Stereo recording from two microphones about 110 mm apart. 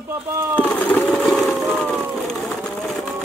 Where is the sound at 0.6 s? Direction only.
15° left (ahead or behind).